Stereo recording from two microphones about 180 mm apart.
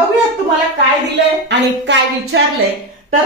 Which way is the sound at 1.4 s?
75° right (ahead or behind).